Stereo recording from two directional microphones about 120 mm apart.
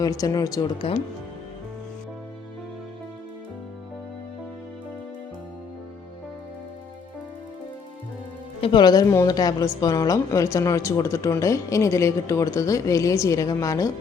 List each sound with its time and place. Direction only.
0.0 s speech: 30° left (ahead or behind)
8.6 s a woman's voice: 40° left (ahead or behind)